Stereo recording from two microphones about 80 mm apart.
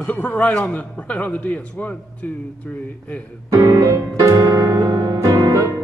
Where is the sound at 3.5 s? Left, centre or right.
Right.